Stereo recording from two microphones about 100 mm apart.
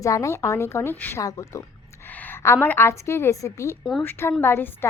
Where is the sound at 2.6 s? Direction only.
25° left (ahead or behind).